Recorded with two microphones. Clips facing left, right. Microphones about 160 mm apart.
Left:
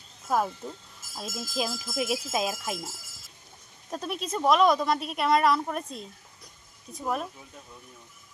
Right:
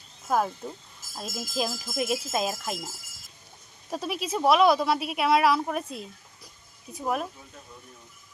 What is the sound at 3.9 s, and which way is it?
A woman's voice, 5° right (ahead or behind).